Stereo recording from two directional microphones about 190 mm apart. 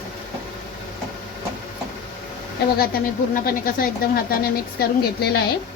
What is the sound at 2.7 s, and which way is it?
Speech, 50° left (ahead or behind).